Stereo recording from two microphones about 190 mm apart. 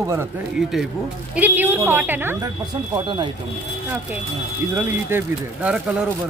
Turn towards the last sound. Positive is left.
turn(degrees=-5)  # may be behind; listen again after turning